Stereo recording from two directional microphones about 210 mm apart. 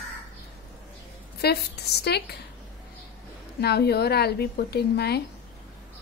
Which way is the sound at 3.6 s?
50° left (ahead or behind).